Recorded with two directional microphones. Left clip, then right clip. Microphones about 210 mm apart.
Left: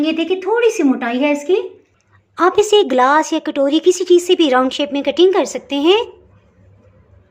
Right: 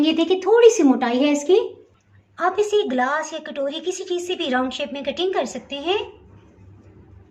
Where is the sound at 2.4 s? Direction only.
45° left (ahead or behind).